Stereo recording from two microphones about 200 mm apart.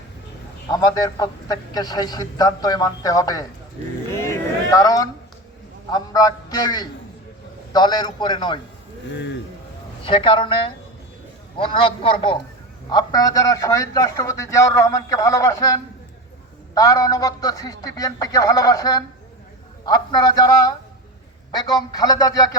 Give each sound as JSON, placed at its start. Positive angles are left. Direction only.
{"t": 0.7, "sound": "a man's voice", "side_deg": 20}
{"t": 4.1, "sound": "a sound", "side_deg": 15}
{"t": 5.9, "sound": "a man's voice", "side_deg": 20}
{"t": 10.0, "sound": "a man's voice", "side_deg": 25}